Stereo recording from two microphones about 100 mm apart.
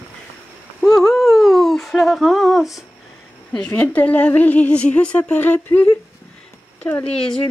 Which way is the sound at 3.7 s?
15° left (ahead or behind).